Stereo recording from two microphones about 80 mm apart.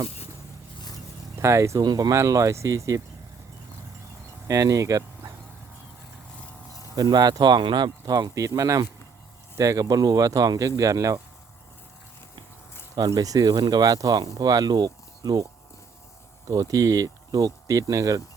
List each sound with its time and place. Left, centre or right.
1.4 s speech: right
1.8 s speech: right
2.1 s speech: right
4.4 s speech: right
6.9 s speech: right
8.0 s speech: right
13.0 s speech: right
16.5 s speech: right